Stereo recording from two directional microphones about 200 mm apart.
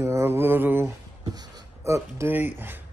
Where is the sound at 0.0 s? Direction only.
15° right (ahead or behind).